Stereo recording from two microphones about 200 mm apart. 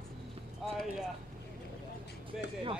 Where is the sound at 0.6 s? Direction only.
Centre (ahead or behind).